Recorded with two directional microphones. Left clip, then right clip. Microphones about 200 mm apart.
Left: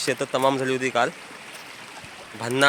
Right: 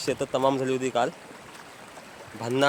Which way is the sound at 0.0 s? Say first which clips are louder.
Left 3 dB; 10° left (ahead or behind).